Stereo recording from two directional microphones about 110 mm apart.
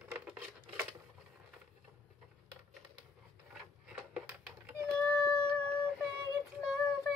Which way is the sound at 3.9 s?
10° right (ahead or behind).